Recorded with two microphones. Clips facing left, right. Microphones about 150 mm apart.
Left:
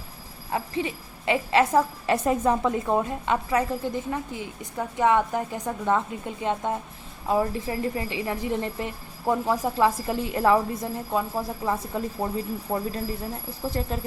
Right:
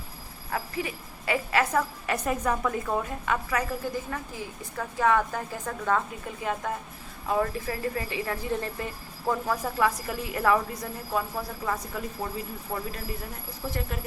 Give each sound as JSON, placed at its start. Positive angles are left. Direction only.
{"t": 0.5, "sound": "a woman's voice", "side_deg": 25}